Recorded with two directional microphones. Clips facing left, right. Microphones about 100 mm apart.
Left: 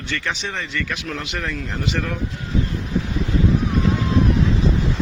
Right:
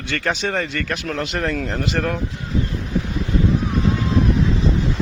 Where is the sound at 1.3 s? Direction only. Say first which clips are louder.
Right 5 dB; 35° right (ahead or behind).